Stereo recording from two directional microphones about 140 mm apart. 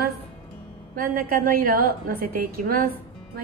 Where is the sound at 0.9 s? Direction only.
90° right.